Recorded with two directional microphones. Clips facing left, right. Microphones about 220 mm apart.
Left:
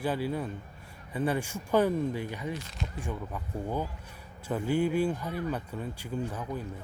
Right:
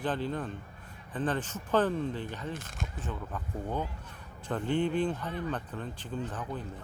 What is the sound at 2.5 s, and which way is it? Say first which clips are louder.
Speech: left 2 dB; 50° right (ahead or behind).